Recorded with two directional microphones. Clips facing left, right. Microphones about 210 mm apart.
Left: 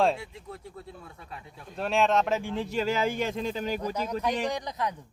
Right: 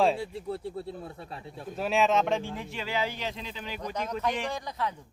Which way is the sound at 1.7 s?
Centre (ahead or behind).